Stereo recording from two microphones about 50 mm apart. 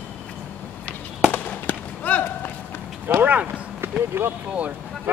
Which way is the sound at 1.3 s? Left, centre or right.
Left.